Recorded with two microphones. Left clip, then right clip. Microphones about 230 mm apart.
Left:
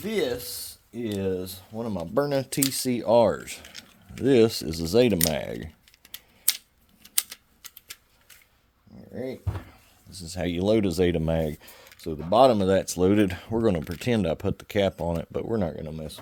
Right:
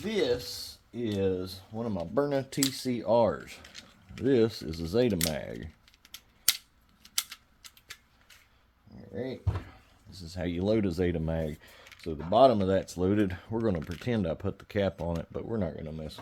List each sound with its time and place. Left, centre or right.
0.0 s speech: left
3.6 s a sound: left
4.2 s speech: left
10.1 s speech: left